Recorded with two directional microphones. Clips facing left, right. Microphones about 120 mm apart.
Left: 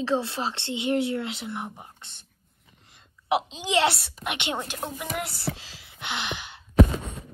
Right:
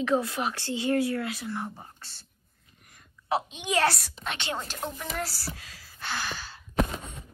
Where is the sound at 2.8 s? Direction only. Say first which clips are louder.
Right 3 dB; 25° left (ahead or behind).